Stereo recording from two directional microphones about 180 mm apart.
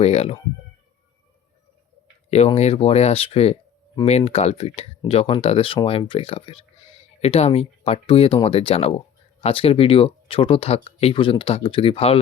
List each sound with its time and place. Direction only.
0.0 s speech: 35° left (ahead or behind)
2.6 s speech: 35° left (ahead or behind)